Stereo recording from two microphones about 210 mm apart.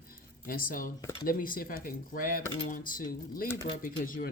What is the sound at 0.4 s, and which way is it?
Speech, 45° left (ahead or behind).